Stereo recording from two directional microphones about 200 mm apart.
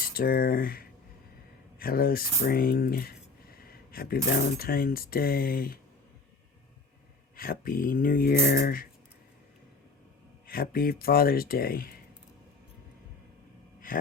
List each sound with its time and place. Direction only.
0.1 s speech: 50° left (ahead or behind)
7.3 s speech: 45° left (ahead or behind)
10.4 s speech: 45° left (ahead or behind)